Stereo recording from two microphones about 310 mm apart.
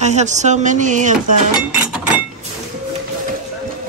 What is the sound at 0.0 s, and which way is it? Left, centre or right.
Speech, right.